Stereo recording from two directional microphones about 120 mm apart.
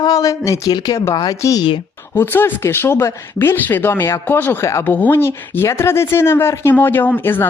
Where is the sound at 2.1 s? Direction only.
20° left (ahead or behind).